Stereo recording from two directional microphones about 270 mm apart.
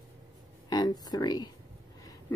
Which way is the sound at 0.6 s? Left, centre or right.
Centre.